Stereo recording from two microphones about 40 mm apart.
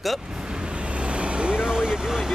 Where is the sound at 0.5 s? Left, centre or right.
Right.